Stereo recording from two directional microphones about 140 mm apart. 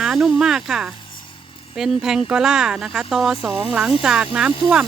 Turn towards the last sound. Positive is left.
turn(degrees=-5)  # may be behind; listen again after turning